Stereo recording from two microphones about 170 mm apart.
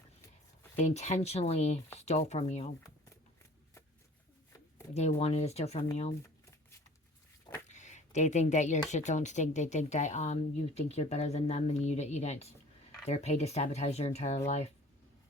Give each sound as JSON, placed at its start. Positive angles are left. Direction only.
{"t": 0.8, "sound": "speech", "side_deg": 45}
{"t": 4.9, "sound": "speech", "side_deg": 40}
{"t": 7.7, "sound": "a sound", "side_deg": 45}
{"t": 8.9, "sound": "speech", "side_deg": 45}